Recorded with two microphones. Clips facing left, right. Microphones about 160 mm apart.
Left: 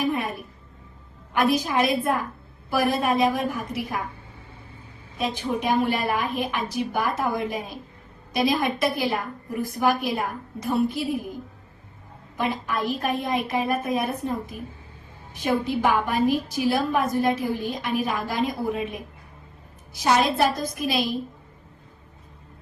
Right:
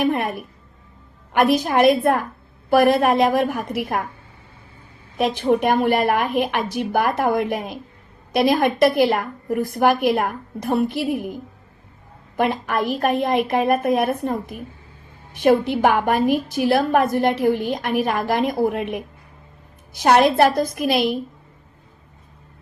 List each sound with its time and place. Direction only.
0.0 s a woman's voice: 65° right (ahead or behind)
5.1 s a woman's voice: 65° right (ahead or behind)
12.4 s a woman's voice: 60° right (ahead or behind)
15.4 s a woman's voice: 70° right (ahead or behind)